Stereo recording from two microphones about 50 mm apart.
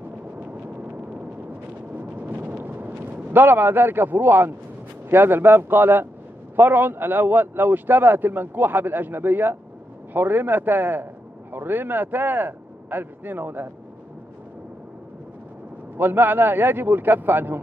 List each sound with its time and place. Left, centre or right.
2.0 s a sound: right
3.3 s a man's voice: right
16.0 s speech: right